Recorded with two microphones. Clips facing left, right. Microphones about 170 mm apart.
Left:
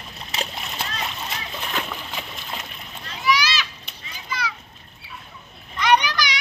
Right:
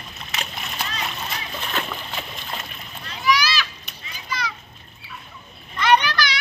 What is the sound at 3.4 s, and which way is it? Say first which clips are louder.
Children playing: right 1 dB; 20° left (ahead or behind).